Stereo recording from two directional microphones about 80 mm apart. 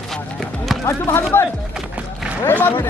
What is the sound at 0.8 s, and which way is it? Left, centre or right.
Speech, left.